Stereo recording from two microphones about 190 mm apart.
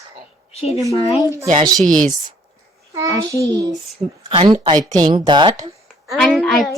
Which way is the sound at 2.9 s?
15° right (ahead or behind).